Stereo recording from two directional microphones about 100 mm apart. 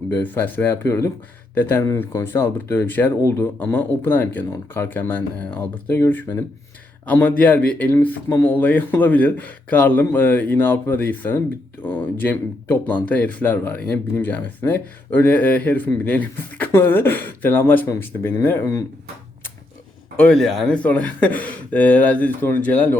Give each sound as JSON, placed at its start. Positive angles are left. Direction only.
{"t": 0.2, "sound": "speech", "side_deg": 20}
{"t": 18.6, "sound": "speech", "side_deg": 35}
{"t": 20.1, "sound": "speech", "side_deg": 5}
{"t": 20.8, "sound": "speech", "side_deg": 15}